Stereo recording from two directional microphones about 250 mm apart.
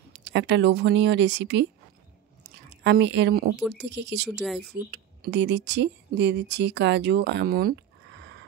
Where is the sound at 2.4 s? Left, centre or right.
Right.